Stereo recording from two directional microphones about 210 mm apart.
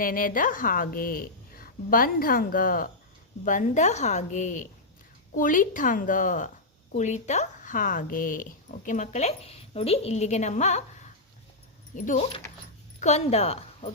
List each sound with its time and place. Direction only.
0.0 s a woman's voice: 40° left (ahead or behind)